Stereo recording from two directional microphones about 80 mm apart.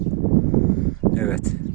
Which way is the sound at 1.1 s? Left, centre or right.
Centre.